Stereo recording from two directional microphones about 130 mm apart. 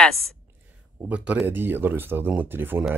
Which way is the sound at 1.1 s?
10° right (ahead or behind).